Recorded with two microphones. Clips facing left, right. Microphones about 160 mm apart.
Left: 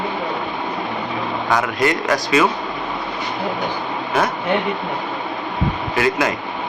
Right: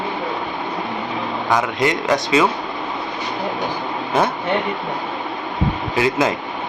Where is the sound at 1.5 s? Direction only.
20° right (ahead or behind).